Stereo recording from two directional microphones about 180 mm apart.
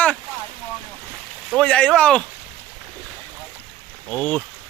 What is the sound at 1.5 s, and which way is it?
Speech, 5° left (ahead or behind).